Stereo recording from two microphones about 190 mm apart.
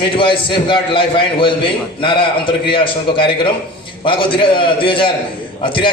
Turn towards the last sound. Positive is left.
turn(degrees=25)  # may be behind; listen again after turning